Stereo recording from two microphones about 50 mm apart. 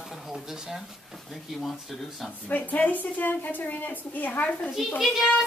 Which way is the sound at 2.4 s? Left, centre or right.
Left.